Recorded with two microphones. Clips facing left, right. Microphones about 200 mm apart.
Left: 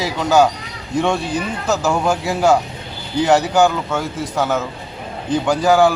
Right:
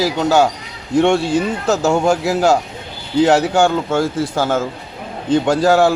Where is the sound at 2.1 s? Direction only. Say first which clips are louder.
Right 4 dB; 70° right (ahead or behind).